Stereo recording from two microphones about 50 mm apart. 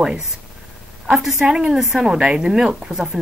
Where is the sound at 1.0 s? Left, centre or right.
Centre.